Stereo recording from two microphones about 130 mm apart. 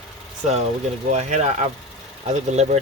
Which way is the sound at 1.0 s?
60° right (ahead or behind).